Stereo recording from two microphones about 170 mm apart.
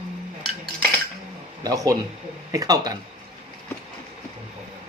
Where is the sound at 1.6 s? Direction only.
20° right (ahead or behind).